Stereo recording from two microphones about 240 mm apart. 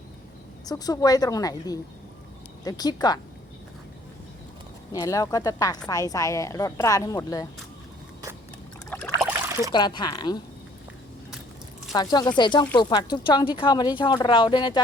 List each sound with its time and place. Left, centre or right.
0.6 s a woman's voice: centre
4.9 s a woman's voice: centre
8.9 s a sound: centre
9.7 s a woman's voice: centre
11.9 s a woman's voice: centre